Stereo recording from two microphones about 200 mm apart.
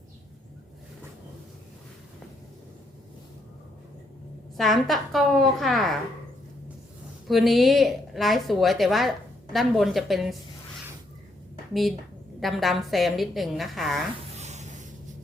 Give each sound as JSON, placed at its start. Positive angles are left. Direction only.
{"t": 4.5, "sound": "a woman's voice", "side_deg": 0}
{"t": 7.3, "sound": "a woman's voice", "side_deg": 0}
{"t": 11.7, "sound": "a woman's voice", "side_deg": 0}
{"t": 14.3, "sound": "a sound", "side_deg": -35}